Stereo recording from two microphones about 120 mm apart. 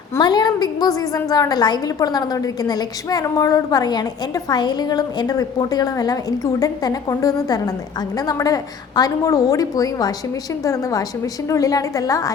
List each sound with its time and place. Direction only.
0.2 s a woman's voice: 35° left (ahead or behind)